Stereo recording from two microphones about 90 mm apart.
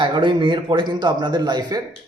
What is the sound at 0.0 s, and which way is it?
A man's voice, 65° right (ahead or behind).